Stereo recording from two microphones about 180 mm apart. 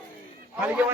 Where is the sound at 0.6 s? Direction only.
10° right (ahead or behind).